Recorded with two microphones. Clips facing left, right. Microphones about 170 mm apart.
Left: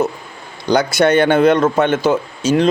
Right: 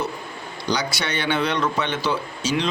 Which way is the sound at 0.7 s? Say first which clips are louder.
Left 12 dB; 50° left (ahead or behind).